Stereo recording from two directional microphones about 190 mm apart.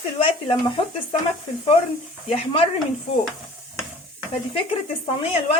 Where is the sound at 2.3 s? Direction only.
30° left (ahead or behind).